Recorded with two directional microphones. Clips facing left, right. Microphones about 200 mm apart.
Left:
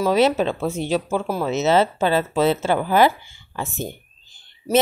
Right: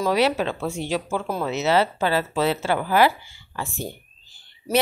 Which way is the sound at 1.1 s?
10° left (ahead or behind).